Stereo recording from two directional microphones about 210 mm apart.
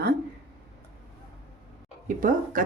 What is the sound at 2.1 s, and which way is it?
Speech, 40° right (ahead or behind).